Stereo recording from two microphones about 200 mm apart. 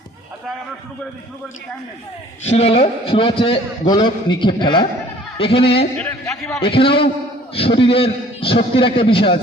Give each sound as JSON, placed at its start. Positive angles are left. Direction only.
{"t": 2.4, "sound": "a man's voice", "side_deg": 30}
{"t": 6.0, "sound": "a man's voice", "side_deg": 10}
{"t": 6.6, "sound": "a man's voice", "side_deg": 25}